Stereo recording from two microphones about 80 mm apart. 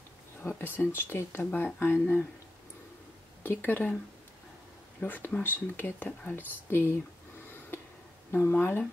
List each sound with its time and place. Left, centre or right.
0.4 s speech: left
3.4 s speech: left
5.0 s speech: left
8.3 s speech: left